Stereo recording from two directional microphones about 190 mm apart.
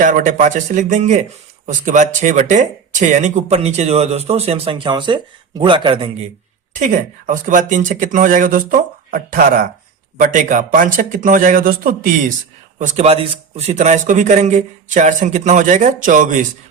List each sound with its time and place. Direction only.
0.0 s speech: 45° right (ahead or behind); by 6.1 s 25° right (ahead or behind)
6.7 s speech: 40° right (ahead or behind)
12.8 s speech: 35° right (ahead or behind)